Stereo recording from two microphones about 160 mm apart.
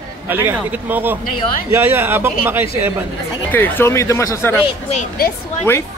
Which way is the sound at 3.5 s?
10° left (ahead or behind).